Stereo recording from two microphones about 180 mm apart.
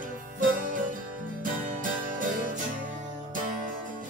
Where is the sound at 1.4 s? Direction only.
50° right (ahead or behind).